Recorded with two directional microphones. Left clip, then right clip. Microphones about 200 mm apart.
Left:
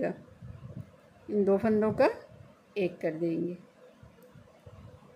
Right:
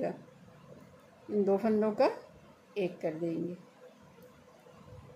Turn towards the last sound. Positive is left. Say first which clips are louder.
# left 3 dB
turn(degrees=20)  # may be behind; listen again after turning